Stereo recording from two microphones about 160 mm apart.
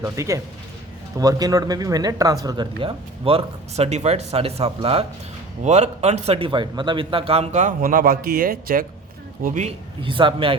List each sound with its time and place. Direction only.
0.0 s a man's voice: 20° right (ahead or behind); by 8.9 s 65° right (ahead or behind)
9.4 s a man's voice: 50° right (ahead or behind)
10.0 s speech: 30° right (ahead or behind)